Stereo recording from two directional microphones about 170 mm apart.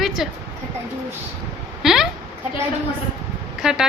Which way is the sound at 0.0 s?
Centre (ahead or behind).